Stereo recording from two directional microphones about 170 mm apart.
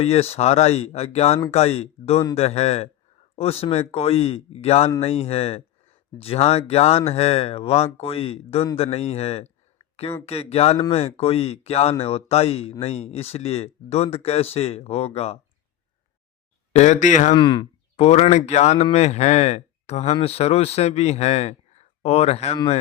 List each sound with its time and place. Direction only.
0.0 s speech: 35° left (ahead or behind)
16.7 s speech: 45° left (ahead or behind)
17.3 s speech: 25° left (ahead or behind)
17.9 s speech: 40° left (ahead or behind)